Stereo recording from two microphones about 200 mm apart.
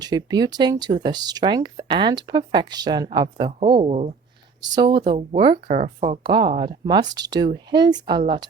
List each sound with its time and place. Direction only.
0.0 s speech: 20° right (ahead or behind)
4.6 s speech: 20° right (ahead or behind)